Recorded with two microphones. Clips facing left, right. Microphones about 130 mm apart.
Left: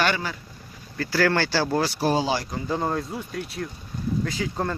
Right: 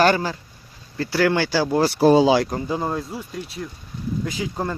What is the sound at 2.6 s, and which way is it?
Speech, 5° right (ahead or behind).